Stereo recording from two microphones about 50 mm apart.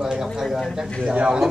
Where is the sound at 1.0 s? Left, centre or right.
Right.